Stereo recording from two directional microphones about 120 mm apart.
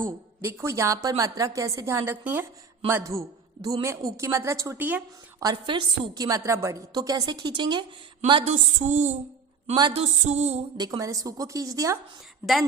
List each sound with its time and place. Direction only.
0.0 s a woman's voice: 20° right (ahead or behind)
5.4 s a woman's voice: 40° right (ahead or behind)
6.2 s a woman's voice: 25° right (ahead or behind)
8.4 s a woman's voice: 80° right
9.9 s a sound: 65° right (ahead or behind)
10.8 s a woman's voice: 30° right (ahead or behind)